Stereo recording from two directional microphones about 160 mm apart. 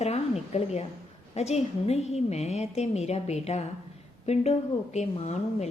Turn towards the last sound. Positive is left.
turn(degrees=45)  # may be behind; listen again after turning